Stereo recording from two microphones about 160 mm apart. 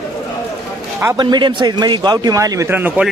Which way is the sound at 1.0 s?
20° right (ahead or behind).